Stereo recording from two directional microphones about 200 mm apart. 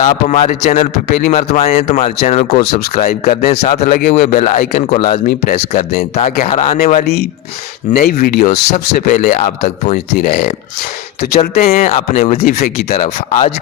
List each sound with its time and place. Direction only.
0.0 s speech: 35° left (ahead or behind)
1.0 s speech: 50° left (ahead or behind)
1.3 s speech: 35° left (ahead or behind)
7.0 s speech: 50° left (ahead or behind)
9.0 s speech: 35° left (ahead or behind)